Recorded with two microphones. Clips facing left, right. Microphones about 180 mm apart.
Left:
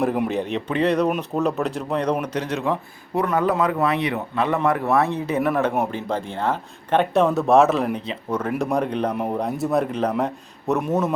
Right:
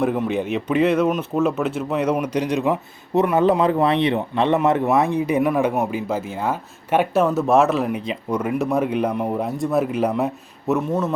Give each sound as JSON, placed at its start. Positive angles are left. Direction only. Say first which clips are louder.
{"t": 0.3, "sound": "speech", "louder": "right 2 dB", "side_deg": 0}
{"t": 8.0, "sound": "speech", "louder": "right 2 dB", "side_deg": -10}
{"t": 9.1, "sound": "speech", "louder": "right 1 dB", "side_deg": 0}
{"t": 10.8, "sound": "a man's voice", "louder": "left 1 dB", "side_deg": 15}